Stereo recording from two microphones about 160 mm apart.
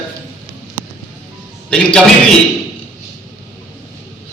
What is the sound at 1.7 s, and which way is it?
Speech, 5° left (ahead or behind).